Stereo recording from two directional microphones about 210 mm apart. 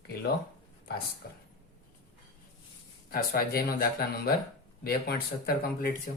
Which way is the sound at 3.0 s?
45° left (ahead or behind).